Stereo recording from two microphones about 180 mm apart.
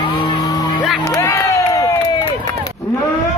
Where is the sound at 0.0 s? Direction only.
25° left (ahead or behind).